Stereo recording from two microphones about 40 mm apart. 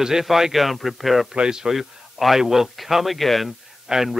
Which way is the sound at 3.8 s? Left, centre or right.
Centre.